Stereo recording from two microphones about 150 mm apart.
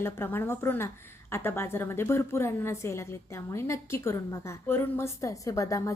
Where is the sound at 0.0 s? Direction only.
15° left (ahead or behind).